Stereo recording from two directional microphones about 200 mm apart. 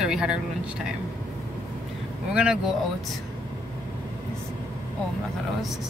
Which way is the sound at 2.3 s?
5° right (ahead or behind).